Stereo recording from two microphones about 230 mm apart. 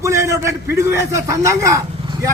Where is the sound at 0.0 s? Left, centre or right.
Centre.